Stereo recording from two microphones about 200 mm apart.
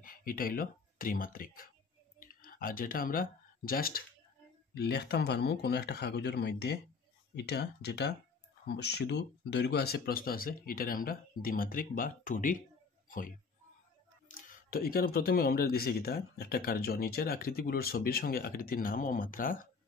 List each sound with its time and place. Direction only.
0.0 s speech: 45° left (ahead or behind)
14.2 s speech: 40° left (ahead or behind)